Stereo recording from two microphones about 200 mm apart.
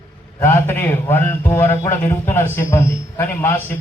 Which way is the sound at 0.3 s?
10° left (ahead or behind).